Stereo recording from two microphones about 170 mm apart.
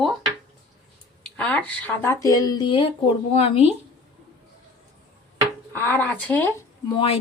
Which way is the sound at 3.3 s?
40° left (ahead or behind).